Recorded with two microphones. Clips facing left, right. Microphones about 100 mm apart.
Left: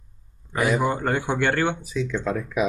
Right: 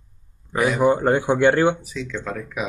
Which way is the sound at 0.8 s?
20° right (ahead or behind).